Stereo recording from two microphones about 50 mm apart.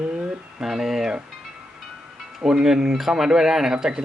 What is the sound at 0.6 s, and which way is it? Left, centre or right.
Speech, centre.